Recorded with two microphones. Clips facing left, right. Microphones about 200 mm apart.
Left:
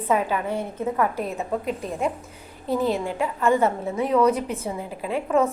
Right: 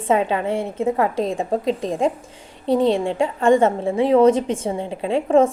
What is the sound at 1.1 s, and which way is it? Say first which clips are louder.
Speech: right 6 dB; 90° right.